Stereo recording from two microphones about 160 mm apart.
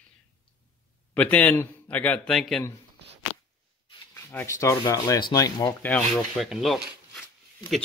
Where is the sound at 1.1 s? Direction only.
10° left (ahead or behind).